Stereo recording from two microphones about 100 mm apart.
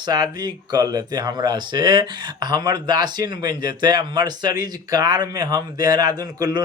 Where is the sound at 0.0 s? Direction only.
40° right (ahead or behind).